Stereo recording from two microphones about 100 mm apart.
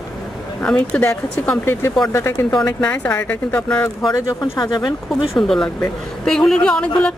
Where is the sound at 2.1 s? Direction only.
25° left (ahead or behind).